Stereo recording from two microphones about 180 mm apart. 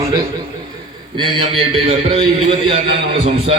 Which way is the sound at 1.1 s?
30° right (ahead or behind).